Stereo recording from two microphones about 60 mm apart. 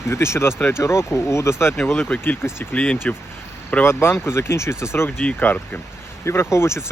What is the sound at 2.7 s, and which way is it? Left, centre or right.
Speech, left.